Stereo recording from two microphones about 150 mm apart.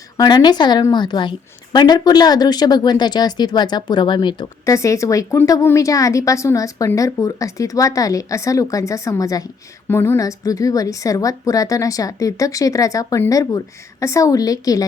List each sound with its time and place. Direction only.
0.2 s speech: 30° left (ahead or behind)
4.6 s speech: 20° left (ahead or behind)